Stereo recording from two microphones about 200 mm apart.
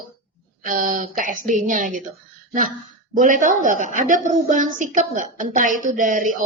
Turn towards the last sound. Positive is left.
turn(degrees=-40)  # may be behind; listen again after turning